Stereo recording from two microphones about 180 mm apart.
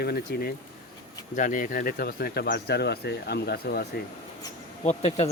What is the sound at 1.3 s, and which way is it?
Speech, 45° left (ahead or behind).